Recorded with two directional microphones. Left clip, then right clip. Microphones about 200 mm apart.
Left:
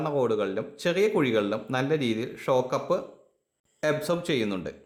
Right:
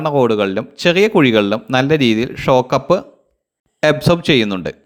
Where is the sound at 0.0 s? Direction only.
30° right (ahead or behind).